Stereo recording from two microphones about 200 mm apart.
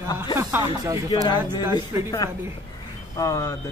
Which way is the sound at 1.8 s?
20° left (ahead or behind).